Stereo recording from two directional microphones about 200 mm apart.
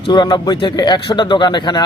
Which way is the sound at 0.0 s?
20° left (ahead or behind).